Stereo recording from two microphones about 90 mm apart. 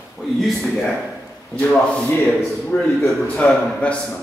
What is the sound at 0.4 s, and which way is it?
Speech, centre (ahead or behind).